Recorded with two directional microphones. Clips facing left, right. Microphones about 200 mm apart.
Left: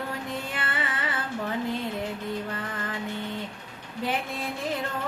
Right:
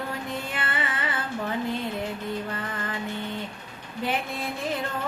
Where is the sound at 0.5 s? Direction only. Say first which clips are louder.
Right 1 dB; 20° right (ahead or behind).